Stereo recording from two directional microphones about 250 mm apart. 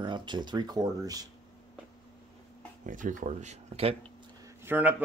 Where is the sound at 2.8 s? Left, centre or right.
Right.